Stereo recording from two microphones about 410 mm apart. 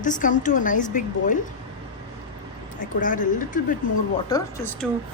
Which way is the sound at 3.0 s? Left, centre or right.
Centre.